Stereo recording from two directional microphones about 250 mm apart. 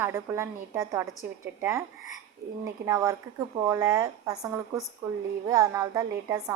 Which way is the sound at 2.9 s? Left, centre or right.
Centre.